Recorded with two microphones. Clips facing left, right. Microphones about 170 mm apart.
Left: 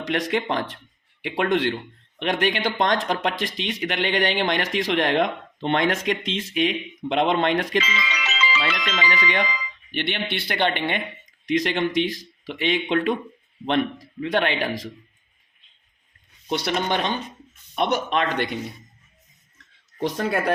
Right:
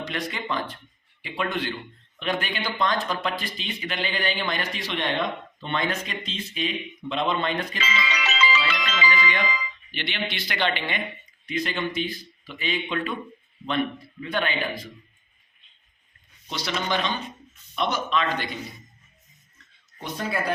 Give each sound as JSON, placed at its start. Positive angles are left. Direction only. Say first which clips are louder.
{"t": 0.0, "sound": "speech", "louder": "left 7 dB", "side_deg": 90}
{"t": 2.1, "sound": "speech", "louder": "left 5 dB", "side_deg": 75}
{"t": 8.8, "sound": "speech", "louder": "left 1 dB", "side_deg": 70}
{"t": 9.9, "sound": "speech", "louder": "left 5 dB", "side_deg": 60}
{"t": 11.4, "sound": "speech", "louder": "left 6 dB", "side_deg": 90}
{"t": 16.5, "sound": "speech", "louder": "left 4 dB", "side_deg": 60}
{"t": 19.5, "sound": "a sound", "louder": "left 14 dB", "side_deg": 70}